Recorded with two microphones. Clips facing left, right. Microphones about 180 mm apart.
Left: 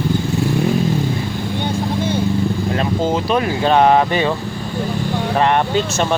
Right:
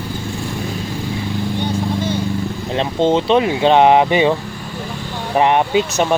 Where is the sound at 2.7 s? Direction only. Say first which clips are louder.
Right 7 dB; 25° right (ahead or behind).